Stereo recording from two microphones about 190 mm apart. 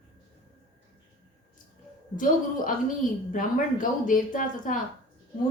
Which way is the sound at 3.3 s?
45° left (ahead or behind).